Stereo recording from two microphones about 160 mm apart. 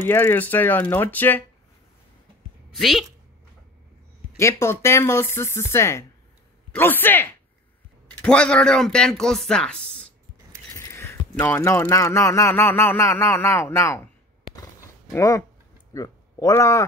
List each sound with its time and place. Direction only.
0.0 s speech: 15° left (ahead or behind)
2.7 s speech: centre (ahead or behind)
4.4 s speech: 15° left (ahead or behind)
6.7 s a sound: 10° left (ahead or behind)
8.2 s speech: 5° left (ahead or behind)
14.5 s a sound: 20° left (ahead or behind)
15.9 s speech: 20° left (ahead or behind)